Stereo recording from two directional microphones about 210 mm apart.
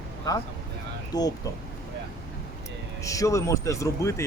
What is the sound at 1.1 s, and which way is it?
Speech, 20° left (ahead or behind).